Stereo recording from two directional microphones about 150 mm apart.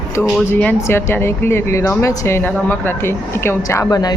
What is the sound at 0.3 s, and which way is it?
A woman's voice, 10° left (ahead or behind).